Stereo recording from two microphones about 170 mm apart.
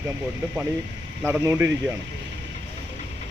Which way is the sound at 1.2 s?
15° right (ahead or behind).